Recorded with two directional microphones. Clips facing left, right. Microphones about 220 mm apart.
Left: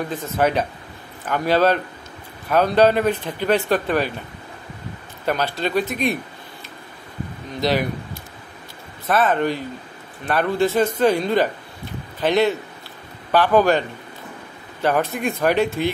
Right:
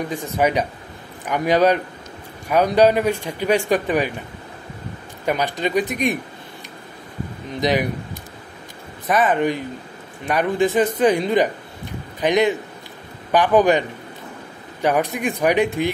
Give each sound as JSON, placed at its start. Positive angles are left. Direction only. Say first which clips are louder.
{"t": 0.1, "sound": "speech", "louder": "even", "side_deg": -15}
{"t": 5.2, "sound": "speech", "louder": "right 1 dB", "side_deg": -15}
{"t": 7.6, "sound": "speech", "louder": "right 1 dB", "side_deg": -15}